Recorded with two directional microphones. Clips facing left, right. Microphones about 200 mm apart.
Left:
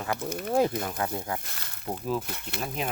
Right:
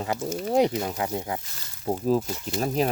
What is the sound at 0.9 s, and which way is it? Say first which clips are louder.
Speech: right 2 dB; 20° right (ahead or behind).